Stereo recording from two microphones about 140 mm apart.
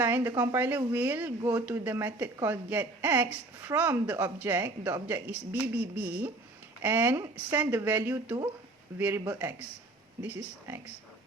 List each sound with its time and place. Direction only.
0.0 s speech: 15° right (ahead or behind)
9.2 s speech: 25° right (ahead or behind)